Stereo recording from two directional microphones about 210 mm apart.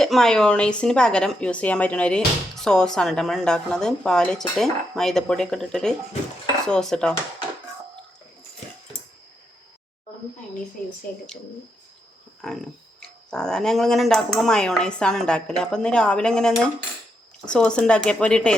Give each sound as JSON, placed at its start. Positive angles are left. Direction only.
{"t": 0.0, "sound": "a woman's voice", "side_deg": 0}
{"t": 12.4, "sound": "a woman's voice", "side_deg": 0}